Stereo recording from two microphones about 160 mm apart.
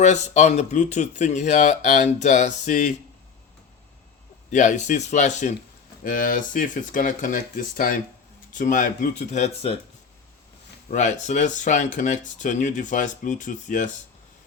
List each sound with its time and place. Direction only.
0.0 s speech: 45° left (ahead or behind)
4.5 s speech: 50° left (ahead or behind)
10.9 s speech: 50° left (ahead or behind)